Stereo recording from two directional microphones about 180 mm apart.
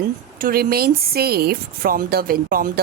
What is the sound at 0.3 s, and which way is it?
Speech, 55° right (ahead or behind).